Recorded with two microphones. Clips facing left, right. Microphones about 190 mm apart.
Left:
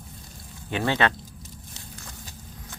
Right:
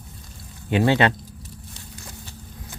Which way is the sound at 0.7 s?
15° right (ahead or behind).